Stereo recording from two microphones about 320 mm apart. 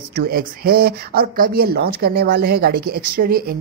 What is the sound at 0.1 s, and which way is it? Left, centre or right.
Speech, right.